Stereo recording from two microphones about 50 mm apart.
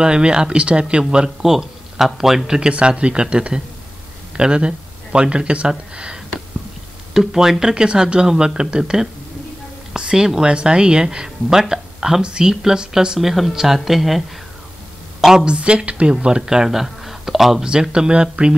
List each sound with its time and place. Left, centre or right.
0.0 s speech: centre
1.4 s speech: centre
2.7 s speech: right
7.2 s a woman's voice: centre
15.4 s speech: right